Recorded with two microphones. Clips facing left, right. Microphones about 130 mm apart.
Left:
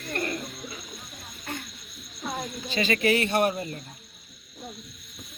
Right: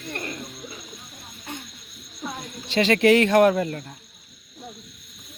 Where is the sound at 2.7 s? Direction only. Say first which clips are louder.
Right 7 dB; 75° right (ahead or behind).